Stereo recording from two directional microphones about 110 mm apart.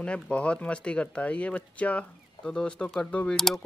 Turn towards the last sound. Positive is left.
turn(degrees=5)  # may be behind; listen again after turning